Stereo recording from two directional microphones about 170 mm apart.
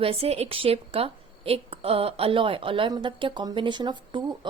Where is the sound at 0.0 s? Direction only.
35° right (ahead or behind).